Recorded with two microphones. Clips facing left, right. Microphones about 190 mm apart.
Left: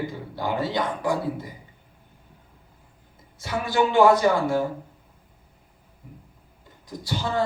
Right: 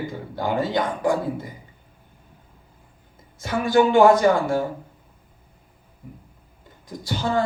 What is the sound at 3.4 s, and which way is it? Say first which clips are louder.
A man's voice: right 5 dB; 50° right (ahead or behind).